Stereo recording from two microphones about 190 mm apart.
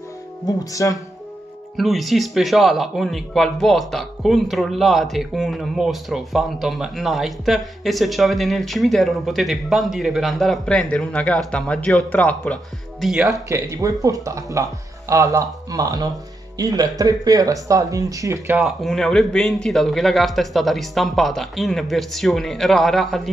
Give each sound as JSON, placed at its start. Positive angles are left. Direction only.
{"t": 0.5, "sound": "speech", "side_deg": 20}
{"t": 1.8, "sound": "speech", "side_deg": 0}
{"t": 13.5, "sound": "speech", "side_deg": -15}
{"t": 18.6, "sound": "speech", "side_deg": 0}